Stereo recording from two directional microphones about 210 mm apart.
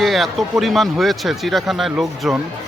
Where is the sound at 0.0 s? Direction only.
Centre (ahead or behind).